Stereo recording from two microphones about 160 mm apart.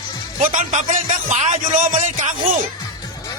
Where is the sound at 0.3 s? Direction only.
55° right (ahead or behind).